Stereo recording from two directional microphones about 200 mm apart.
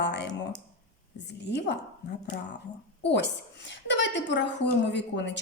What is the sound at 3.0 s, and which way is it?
A woman's voice, 60° left (ahead or behind).